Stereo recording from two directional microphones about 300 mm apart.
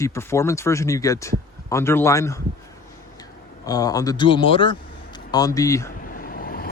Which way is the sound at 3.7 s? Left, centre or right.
Centre.